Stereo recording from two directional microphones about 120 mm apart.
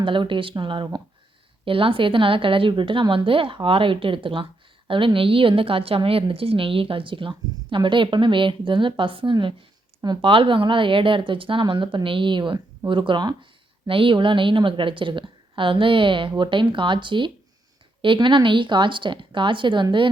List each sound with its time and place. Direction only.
0.0 s a woman's voice: 45° right (ahead or behind)